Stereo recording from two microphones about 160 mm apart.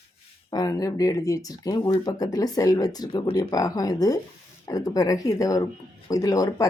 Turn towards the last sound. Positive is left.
turn(degrees=20)  # may be behind; listen again after turning